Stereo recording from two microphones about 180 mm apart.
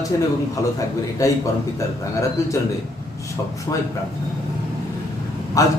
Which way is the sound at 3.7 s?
15° left (ahead or behind).